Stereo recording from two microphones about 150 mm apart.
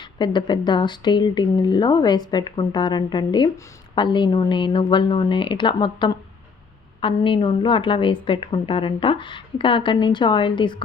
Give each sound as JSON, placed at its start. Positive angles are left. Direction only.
{"t": 0.0, "sound": "a woman's voice", "side_deg": 30}